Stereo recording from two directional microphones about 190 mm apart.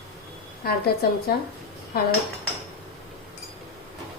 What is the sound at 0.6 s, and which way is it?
Speech, 55° left (ahead or behind).